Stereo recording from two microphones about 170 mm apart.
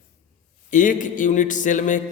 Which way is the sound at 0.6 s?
50° left (ahead or behind).